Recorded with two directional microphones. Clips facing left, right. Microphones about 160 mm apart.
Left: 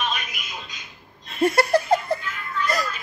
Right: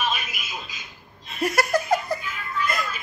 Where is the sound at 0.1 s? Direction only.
5° right (ahead or behind).